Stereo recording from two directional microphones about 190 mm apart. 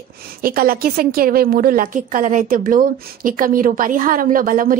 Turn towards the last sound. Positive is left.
turn(degrees=-45)  # may be behind; listen again after turning